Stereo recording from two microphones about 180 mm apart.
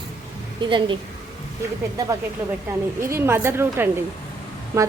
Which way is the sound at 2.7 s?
15° right (ahead or behind).